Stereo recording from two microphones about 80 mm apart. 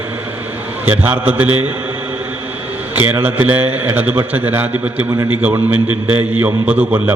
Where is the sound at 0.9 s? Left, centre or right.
Right.